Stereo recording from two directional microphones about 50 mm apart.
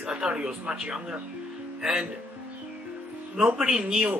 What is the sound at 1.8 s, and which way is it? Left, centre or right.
Speech, centre.